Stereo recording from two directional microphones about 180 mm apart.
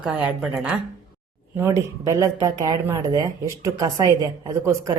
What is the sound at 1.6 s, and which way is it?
Speech, 15° right (ahead or behind).